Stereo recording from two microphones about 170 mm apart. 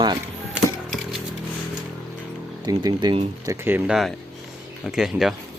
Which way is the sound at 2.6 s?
25° right (ahead or behind).